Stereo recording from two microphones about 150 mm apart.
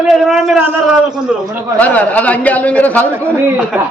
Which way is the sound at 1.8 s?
10° left (ahead or behind).